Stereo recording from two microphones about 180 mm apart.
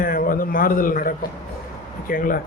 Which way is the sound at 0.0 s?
55° left (ahead or behind).